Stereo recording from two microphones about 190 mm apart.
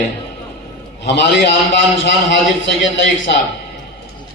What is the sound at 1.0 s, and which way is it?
A man's voice, 65° left (ahead or behind).